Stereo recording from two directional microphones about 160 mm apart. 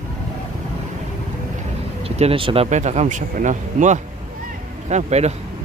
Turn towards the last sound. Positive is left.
turn(degrees=-45)  # may be behind; listen again after turning